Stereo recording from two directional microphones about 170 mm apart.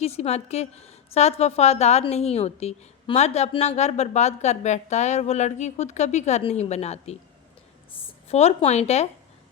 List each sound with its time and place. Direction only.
0.0 s a woman's voice: 40° left (ahead or behind)
8.3 s a woman's voice: 40° left (ahead or behind)